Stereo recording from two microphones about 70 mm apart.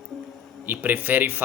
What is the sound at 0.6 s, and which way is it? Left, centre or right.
Speech, right.